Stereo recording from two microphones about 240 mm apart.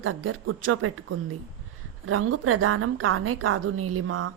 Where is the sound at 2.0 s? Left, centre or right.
Right.